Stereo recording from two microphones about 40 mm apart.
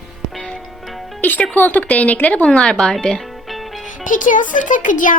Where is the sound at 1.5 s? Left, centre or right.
Left.